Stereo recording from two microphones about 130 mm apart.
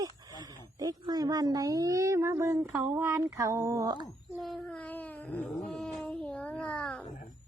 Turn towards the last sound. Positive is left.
turn(degrees=10)  # may be behind; listen again after turning